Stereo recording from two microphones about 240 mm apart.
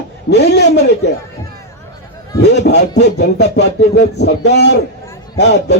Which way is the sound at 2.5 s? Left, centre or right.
Left.